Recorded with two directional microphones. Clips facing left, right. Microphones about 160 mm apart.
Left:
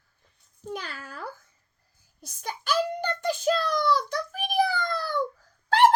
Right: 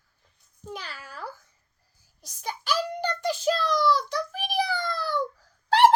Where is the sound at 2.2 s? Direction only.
50° left (ahead or behind).